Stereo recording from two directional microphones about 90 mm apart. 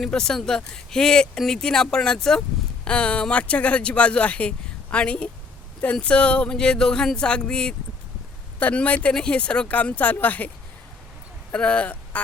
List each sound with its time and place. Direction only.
0.0 s speech: 5° left (ahead or behind)
11.5 s speech: 15° left (ahead or behind)